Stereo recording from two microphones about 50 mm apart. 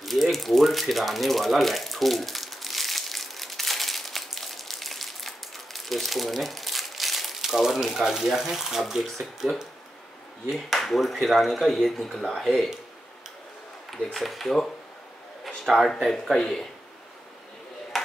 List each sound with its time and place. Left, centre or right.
0.0 s a sound: centre
10.5 s speech: centre
14.1 s speech: centre
15.7 s speech: centre
16.3 s speech: centre